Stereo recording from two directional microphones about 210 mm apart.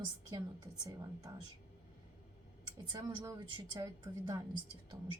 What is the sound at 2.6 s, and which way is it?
A woman's voice, 20° right (ahead or behind).